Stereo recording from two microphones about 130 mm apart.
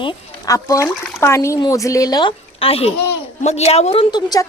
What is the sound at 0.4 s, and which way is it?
A woman's voice, 25° left (ahead or behind).